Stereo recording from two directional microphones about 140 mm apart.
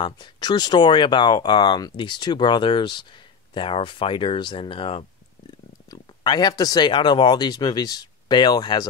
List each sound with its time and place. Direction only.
0.0 s speech: 35° left (ahead or behind)
5.9 s speech: 30° left (ahead or behind)